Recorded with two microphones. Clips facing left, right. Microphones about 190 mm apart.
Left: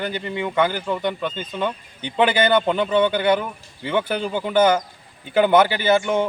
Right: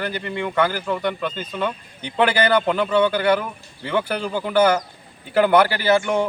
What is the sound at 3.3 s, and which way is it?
Speech, centre (ahead or behind).